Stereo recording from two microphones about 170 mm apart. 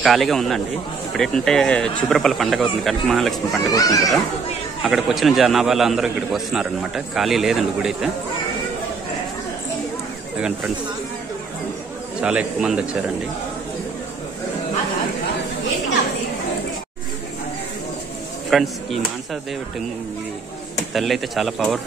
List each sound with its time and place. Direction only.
0.0 s a man's voice: centre (ahead or behind)
3.6 s speech: 20° left (ahead or behind)
4.8 s a man's voice: centre (ahead or behind)
10.3 s a man's voice: 5° right (ahead or behind)
12.2 s a man's voice: 5° right (ahead or behind)
18.5 s a man's voice: centre (ahead or behind)
20.9 s a man's voice: centre (ahead or behind)